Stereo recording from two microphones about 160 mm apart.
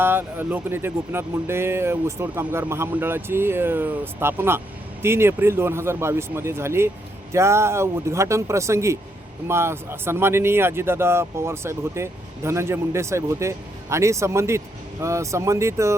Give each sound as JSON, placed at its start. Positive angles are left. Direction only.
{"t": 0.0, "sound": "speech", "side_deg": -15}